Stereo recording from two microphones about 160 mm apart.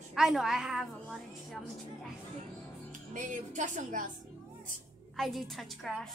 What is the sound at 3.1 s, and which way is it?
Speech, 55° right (ahead or behind).